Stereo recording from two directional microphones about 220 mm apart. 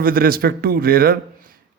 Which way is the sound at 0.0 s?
40° right (ahead or behind).